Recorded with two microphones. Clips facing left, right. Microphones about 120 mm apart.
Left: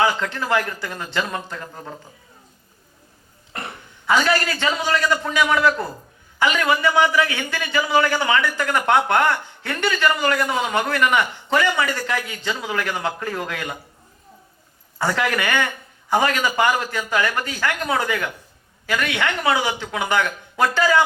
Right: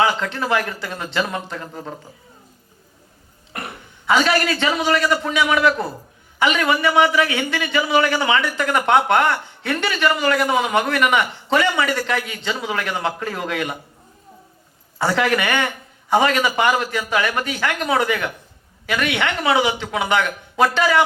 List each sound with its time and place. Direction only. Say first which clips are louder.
0.0 s a man's voice: right 1 dB; 20° right (ahead or behind)
3.7 s a man's voice: right 1 dB; 20° right (ahead or behind)
14.9 s a man's voice: right 3 dB; 20° right (ahead or behind)